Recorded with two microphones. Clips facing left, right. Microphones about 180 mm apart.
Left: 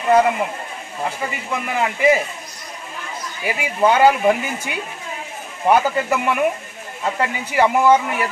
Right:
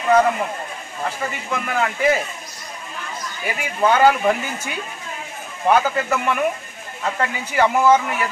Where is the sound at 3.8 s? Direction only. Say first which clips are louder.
Left 1 dB; 15° left (ahead or behind).